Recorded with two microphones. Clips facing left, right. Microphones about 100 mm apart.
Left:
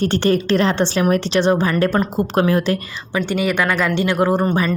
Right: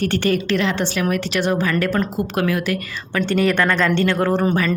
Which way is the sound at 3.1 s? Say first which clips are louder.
Right 1 dB; 5° left (ahead or behind).